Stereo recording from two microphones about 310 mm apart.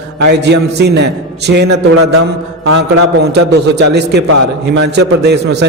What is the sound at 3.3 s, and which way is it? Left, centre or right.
A man's voice, right.